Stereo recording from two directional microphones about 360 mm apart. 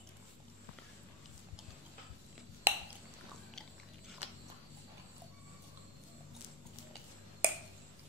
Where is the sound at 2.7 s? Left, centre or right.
Centre.